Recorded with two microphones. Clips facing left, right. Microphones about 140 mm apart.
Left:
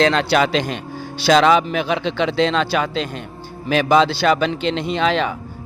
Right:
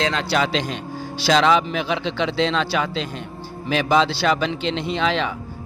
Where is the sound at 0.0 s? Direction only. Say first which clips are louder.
Left 5 dB; 70° left (ahead or behind).